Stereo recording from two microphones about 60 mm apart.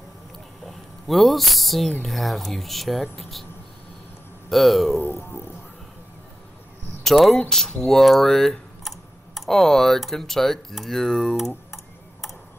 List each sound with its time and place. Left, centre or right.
0.7 s speech: centre
4.5 s speech: centre
7.0 s speech: centre